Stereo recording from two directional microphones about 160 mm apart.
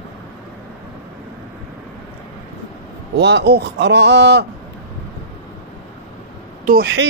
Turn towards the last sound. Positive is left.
turn(degrees=-65)  # may be behind; listen again after turning